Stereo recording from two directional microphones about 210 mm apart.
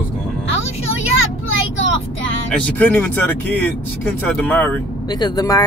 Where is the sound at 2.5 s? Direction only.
5° left (ahead or behind).